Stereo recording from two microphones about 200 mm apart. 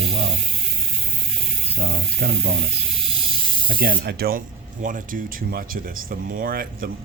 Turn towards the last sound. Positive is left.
turn(degrees=-45)  # may be behind; listen again after turning